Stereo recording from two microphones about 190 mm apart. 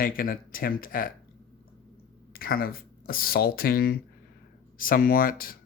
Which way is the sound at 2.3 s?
50° left (ahead or behind).